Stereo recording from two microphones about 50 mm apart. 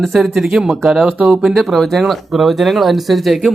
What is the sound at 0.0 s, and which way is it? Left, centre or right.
Speech, centre.